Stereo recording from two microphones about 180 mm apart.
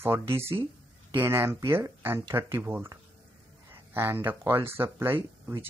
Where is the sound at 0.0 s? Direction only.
15° right (ahead or behind).